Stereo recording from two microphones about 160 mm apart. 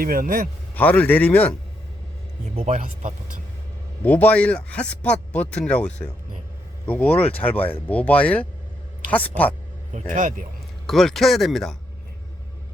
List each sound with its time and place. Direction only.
0.0 s a man's voice: 65° right (ahead or behind)
0.7 s speech: 10° left (ahead or behind)
2.8 s speech: 50° right (ahead or behind)
4.0 s speech: 10° left (ahead or behind)
9.9 s speech: 50° right (ahead or behind)
10.8 s speech: centre (ahead or behind)